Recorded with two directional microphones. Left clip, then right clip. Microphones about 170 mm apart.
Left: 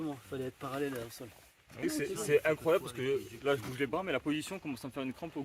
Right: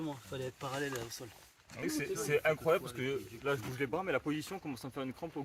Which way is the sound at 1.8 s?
25° left (ahead or behind).